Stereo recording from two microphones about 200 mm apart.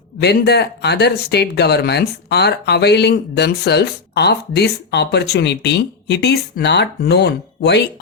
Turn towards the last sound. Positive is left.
turn(degrees=60)  # may be behind; listen again after turning